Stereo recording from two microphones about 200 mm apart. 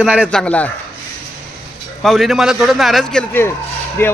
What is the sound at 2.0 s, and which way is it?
A man's voice, centre (ahead or behind).